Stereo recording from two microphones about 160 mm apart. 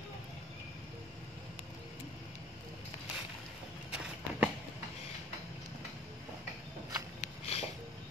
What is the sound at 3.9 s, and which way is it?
Walk, 5° right (ahead or behind).